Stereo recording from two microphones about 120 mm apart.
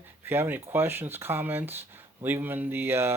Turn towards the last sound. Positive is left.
turn(degrees=-20)  # may be behind; listen again after turning